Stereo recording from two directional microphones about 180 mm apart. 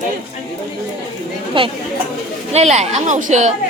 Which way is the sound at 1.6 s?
30° right (ahead or behind).